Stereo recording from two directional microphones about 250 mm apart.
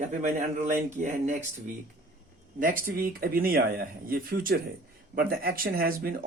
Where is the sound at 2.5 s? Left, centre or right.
Right.